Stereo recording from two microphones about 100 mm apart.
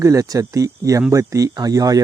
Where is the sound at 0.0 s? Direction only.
35° right (ahead or behind).